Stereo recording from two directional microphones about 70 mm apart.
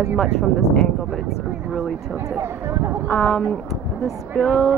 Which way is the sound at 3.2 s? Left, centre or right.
Centre.